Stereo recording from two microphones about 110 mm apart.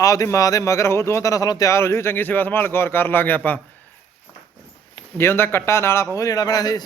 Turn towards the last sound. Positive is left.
turn(degrees=35)  # may be behind; listen again after turning